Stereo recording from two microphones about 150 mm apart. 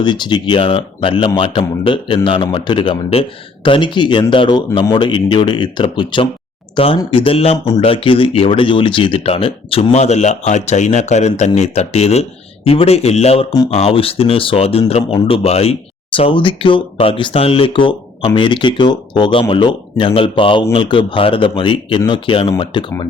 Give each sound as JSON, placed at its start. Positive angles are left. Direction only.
{"t": 0.0, "sound": "a man's voice", "side_deg": 30}